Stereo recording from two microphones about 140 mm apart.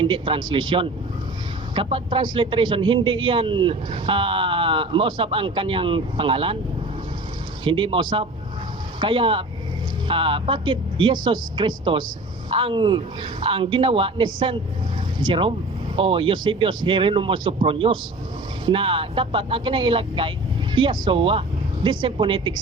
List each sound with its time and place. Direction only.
0.0 s a man's voice: 35° right (ahead or behind)
7.6 s a man's voice: 40° right (ahead or behind)